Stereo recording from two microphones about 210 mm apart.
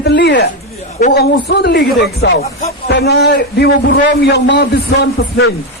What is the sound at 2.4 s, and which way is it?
Speech, 30° left (ahead or behind).